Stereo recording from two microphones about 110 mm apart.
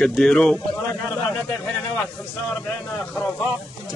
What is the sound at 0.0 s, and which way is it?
Speech, 5° left (ahead or behind).